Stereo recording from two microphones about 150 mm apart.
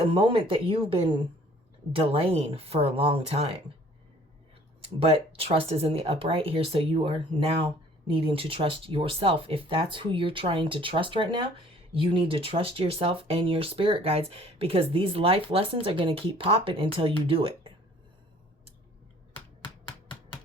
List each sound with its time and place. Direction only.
0.0 s speech: 35° right (ahead or behind)
4.9 s speech: 40° right (ahead or behind)